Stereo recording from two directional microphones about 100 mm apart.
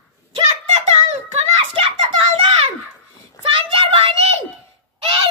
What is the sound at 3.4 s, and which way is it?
Child singing, 65° right (ahead or behind).